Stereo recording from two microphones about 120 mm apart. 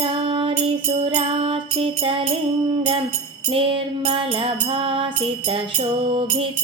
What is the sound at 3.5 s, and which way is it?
Music, 50° right (ahead or behind).